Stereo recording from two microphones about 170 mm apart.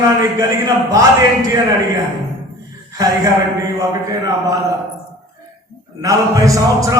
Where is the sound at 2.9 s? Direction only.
20° right (ahead or behind).